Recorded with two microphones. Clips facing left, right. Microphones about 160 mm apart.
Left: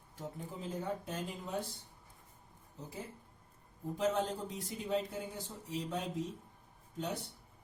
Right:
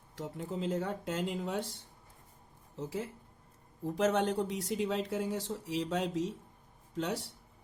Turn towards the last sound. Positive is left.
turn(degrees=-90)